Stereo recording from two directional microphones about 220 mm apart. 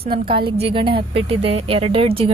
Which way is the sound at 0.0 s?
25° right (ahead or behind).